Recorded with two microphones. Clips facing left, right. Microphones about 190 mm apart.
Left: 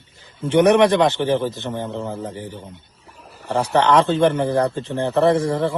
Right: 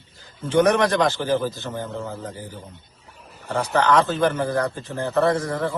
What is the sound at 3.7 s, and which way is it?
A man's voice, 30° left (ahead or behind).